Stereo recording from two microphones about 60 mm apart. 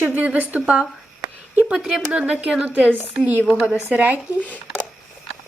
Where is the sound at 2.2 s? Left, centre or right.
Right.